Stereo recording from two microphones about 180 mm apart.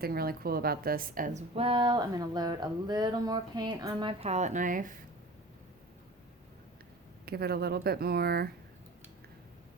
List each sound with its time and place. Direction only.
0.0 s a woman's voice: 60° right (ahead or behind); by 4.1 s 25° right (ahead or behind)
4.2 s speech: 40° right (ahead or behind)
7.3 s speech: 60° right (ahead or behind)